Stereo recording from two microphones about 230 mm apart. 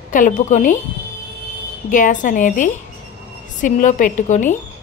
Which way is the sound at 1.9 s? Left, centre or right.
Left.